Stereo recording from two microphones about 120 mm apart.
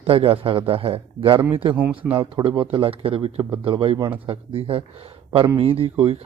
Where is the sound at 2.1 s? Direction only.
45° right (ahead or behind).